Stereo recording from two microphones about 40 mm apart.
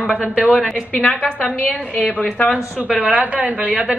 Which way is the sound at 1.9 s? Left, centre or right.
Left.